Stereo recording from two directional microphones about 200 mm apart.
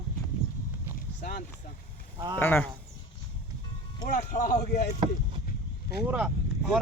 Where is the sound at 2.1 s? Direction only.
20° right (ahead or behind).